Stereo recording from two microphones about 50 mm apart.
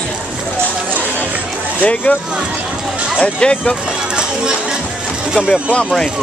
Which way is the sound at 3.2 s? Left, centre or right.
Centre.